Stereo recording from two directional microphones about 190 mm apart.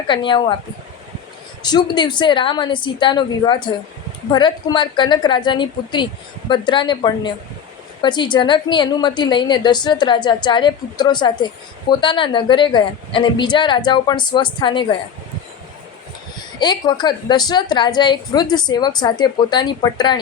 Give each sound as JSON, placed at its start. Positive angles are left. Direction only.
{"t": 0.1, "sound": "a woman's voice", "side_deg": 25}
{"t": 1.6, "sound": "a woman's voice", "side_deg": 20}
{"t": 16.6, "sound": "a woman's voice", "side_deg": 20}